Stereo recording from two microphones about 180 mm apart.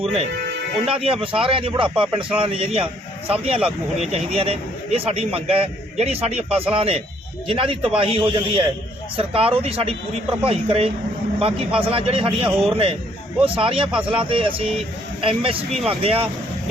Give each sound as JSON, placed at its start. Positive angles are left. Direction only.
{"t": 0.0, "sound": "a man's voice", "side_deg": -35}